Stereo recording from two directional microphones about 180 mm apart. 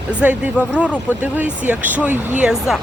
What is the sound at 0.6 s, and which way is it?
Speech, 5° right (ahead or behind).